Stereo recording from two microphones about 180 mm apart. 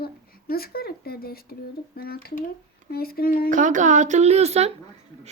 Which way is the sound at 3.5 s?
45° right (ahead or behind).